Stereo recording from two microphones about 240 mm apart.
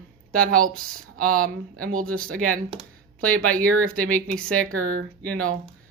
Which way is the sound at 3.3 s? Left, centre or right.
Centre.